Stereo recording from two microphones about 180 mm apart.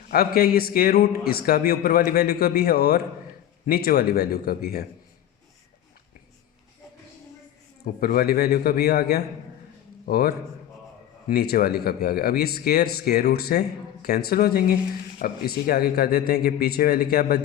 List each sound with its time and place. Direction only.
0.3 s speech: 55° left (ahead or behind)
8.0 s speech: 55° left (ahead or behind)